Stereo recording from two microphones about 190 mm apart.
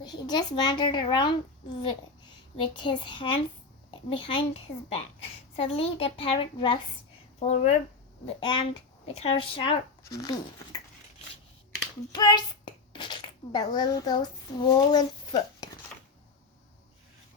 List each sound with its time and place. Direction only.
0.0 s a child's voice: 20° left (ahead or behind)
7.3 s speech: 35° left (ahead or behind)
8.4 s a child's voice: 25° left (ahead or behind)
10.0 s speech: 55° left (ahead or behind)
12.1 s a child's voice: 20° left (ahead or behind)